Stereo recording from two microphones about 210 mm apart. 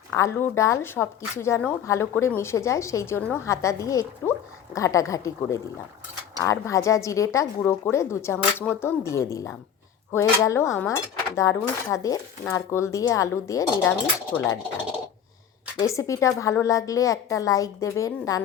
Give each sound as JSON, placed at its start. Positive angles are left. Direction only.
{"t": 0.1, "sound": "speech", "side_deg": 15}
{"t": 15.8, "sound": "speech", "side_deg": 15}